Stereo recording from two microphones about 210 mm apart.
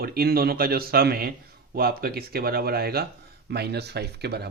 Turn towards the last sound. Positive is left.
turn(degrees=-50)  # may be behind; listen again after turning